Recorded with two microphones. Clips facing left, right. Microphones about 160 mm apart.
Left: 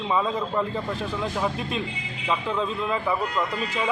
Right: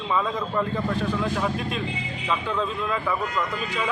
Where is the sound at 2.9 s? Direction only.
20° left (ahead or behind).